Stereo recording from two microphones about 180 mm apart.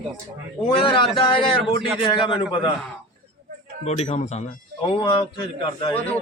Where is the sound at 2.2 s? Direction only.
30° left (ahead or behind).